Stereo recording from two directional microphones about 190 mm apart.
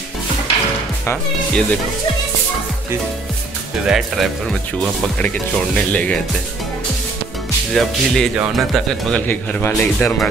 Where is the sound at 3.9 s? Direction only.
Centre (ahead or behind).